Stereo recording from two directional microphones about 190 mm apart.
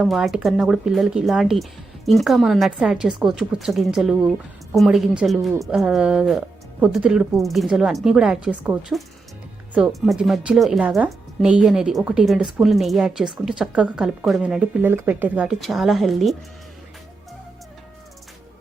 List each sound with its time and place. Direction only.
0.0 s a woman's voice: centre (ahead or behind)